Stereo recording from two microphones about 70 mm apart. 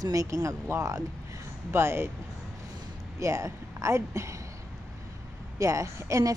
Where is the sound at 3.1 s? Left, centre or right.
Right.